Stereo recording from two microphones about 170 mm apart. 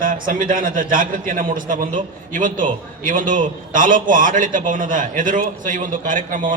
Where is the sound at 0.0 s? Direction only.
55° right (ahead or behind).